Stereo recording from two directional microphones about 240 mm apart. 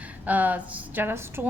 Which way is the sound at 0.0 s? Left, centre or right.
Centre.